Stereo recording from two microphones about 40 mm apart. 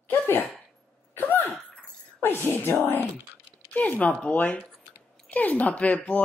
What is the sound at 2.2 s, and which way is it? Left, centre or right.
Speech, left.